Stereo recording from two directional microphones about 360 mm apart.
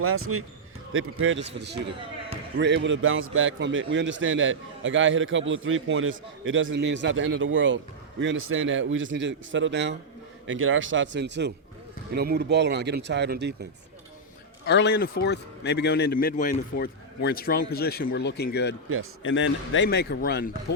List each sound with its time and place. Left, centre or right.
0.0 s a man's voice: right
14.7 s a man's voice: left